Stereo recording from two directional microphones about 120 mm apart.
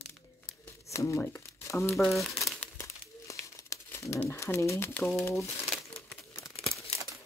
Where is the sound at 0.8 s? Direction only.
25° left (ahead or behind).